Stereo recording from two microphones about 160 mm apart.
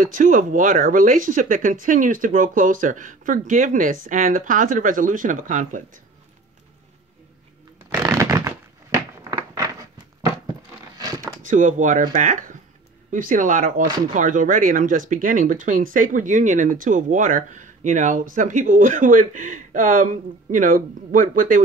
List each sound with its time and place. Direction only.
0.0 s speech: 55° right (ahead or behind)
8.0 s shuffling cards: 20° right (ahead or behind)
11.1 s speech: 55° right (ahead or behind)